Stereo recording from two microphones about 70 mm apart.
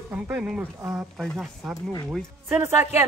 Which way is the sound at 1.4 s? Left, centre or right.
Centre.